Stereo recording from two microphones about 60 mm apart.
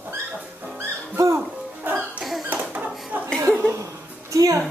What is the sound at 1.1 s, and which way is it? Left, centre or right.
Music, right.